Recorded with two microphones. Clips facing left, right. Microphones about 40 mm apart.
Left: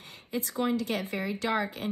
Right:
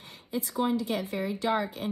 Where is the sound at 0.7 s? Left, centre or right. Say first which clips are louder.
Right 1 dB; left.